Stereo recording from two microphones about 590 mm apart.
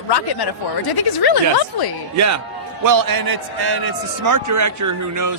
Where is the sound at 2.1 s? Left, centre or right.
Right.